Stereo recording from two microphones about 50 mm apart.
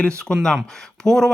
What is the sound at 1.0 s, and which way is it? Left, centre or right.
Speech, centre.